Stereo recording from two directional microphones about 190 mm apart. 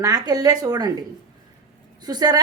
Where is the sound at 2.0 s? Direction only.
20° right (ahead or behind).